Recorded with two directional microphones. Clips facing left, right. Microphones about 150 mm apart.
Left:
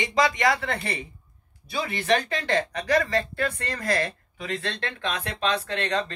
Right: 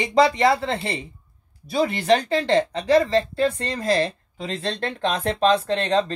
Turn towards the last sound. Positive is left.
turn(degrees=-30)  # may be behind; listen again after turning